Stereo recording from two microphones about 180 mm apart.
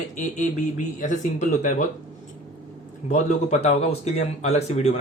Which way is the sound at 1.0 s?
45° left (ahead or behind).